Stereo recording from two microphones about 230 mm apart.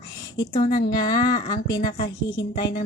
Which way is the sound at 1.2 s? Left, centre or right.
Centre.